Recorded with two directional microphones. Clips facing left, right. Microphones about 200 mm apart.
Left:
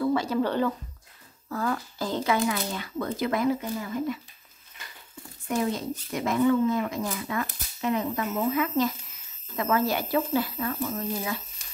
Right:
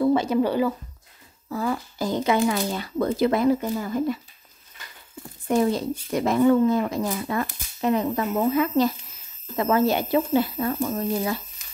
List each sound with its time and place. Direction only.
0.0 s speech: 20° right (ahead or behind)
2.3 s speech: 35° right (ahead or behind)
5.5 s speech: 35° right (ahead or behind)